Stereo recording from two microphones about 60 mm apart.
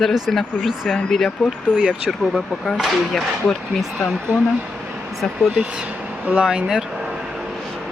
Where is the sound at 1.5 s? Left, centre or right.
Centre.